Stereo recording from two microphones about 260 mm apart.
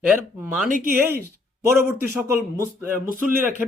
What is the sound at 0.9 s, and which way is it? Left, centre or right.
A man's voice, centre.